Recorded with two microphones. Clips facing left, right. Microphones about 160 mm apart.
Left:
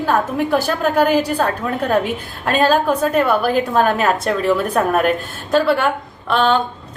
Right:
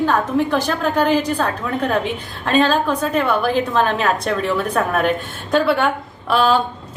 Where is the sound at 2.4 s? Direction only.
10° left (ahead or behind).